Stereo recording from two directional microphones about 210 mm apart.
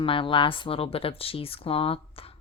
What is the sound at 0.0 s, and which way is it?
Speech, 25° left (ahead or behind).